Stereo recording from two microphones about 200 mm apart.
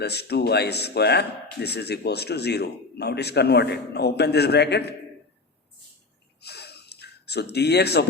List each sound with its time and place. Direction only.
0.0 s speech: 55° left (ahead or behind)
6.4 s gasp: 55° left (ahead or behind)